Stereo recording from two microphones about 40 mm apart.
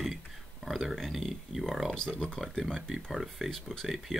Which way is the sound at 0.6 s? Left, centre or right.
Centre.